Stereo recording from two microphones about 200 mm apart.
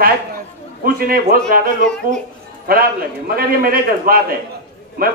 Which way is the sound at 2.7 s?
50° right (ahead or behind).